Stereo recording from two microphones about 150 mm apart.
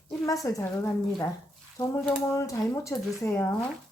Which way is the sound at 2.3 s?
20° left (ahead or behind).